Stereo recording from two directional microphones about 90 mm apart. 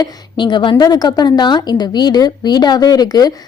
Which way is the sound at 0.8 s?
45° left (ahead or behind).